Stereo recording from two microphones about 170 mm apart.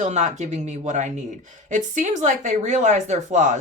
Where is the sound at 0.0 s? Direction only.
45° right (ahead or behind).